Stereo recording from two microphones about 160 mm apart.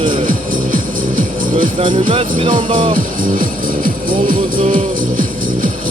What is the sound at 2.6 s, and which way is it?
Speech, 30° right (ahead or behind).